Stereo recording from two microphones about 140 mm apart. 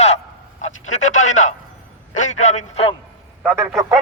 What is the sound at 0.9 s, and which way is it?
A man's voice, 60° left (ahead or behind).